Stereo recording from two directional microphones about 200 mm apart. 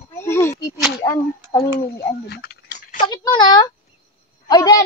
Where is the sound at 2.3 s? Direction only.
55° left (ahead or behind).